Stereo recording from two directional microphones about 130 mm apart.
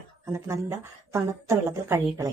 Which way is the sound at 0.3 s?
20° right (ahead or behind).